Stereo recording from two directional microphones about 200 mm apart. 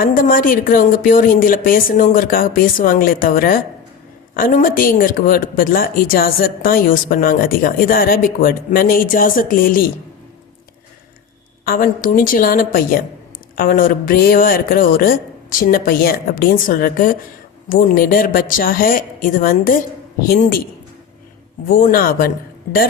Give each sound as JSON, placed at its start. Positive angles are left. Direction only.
{"t": 0.0, "sound": "a woman's voice", "side_deg": 45}
{"t": 11.6, "sound": "a woman's voice", "side_deg": 45}
{"t": 21.7, "sound": "a woman's voice", "side_deg": 45}